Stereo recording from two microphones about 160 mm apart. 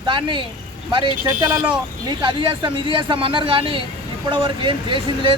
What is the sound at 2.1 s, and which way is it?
Speech, 30° right (ahead or behind).